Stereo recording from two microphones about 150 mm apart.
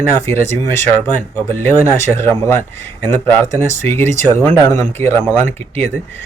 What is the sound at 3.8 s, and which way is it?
Speech, 15° left (ahead or behind).